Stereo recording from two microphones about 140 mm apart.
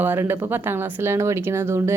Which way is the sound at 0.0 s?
15° right (ahead or behind).